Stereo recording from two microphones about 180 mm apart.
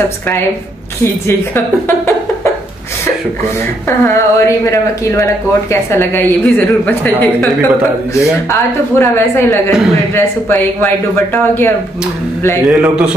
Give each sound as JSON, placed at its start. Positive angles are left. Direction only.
{"t": 4.0, "sound": "a woman's voice", "side_deg": 15}
{"t": 12.6, "sound": "a man's voice", "side_deg": -5}